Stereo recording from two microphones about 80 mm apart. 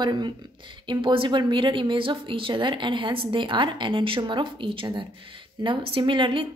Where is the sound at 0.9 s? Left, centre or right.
Right.